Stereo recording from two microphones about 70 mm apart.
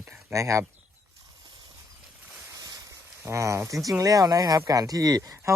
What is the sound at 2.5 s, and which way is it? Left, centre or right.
Boat, right.